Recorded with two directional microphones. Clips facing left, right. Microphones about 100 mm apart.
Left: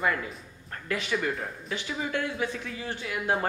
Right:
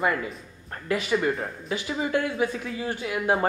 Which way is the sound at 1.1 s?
25° right (ahead or behind).